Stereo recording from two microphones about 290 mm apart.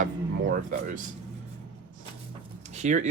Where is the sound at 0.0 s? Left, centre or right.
Right.